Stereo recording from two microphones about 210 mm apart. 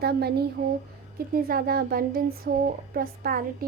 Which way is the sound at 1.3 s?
45° right (ahead or behind).